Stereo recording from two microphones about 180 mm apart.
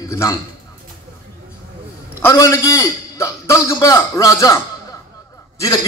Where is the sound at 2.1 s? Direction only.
15° left (ahead or behind).